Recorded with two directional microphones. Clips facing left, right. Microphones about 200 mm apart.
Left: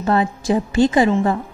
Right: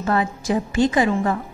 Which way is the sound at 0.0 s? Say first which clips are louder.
Left 3 dB; 30° left (ahead or behind).